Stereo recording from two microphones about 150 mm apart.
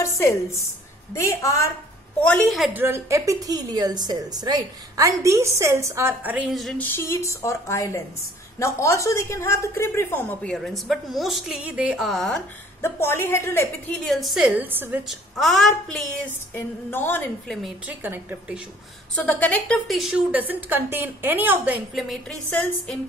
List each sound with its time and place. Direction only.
0.0 s a woman's voice: 20° left (ahead or behind)
2.1 s a woman's voice: 10° left (ahead or behind)
2.7 s a woman's voice: 15° right (ahead or behind)
6.8 s a woman's voice: 15° left (ahead or behind)
10.4 s a woman's voice: centre (ahead or behind)
12.8 s speech: 15° left (ahead or behind)
13.9 s a woman's voice: centre (ahead or behind)
15.0 s a woman's voice: centre (ahead or behind)
16.5 s speech: 15° left (ahead or behind)
17.5 s a woman's voice: centre (ahead or behind)
17.8 s a woman's voice: 15° right (ahead or behind)
19.1 s a woman's voice: 10° left (ahead or behind); by 21.8 s 10° right (ahead or behind)
21.9 s a woman's voice: centre (ahead or behind)